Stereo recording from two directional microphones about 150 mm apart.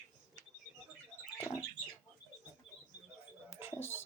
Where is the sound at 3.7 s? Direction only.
15° left (ahead or behind).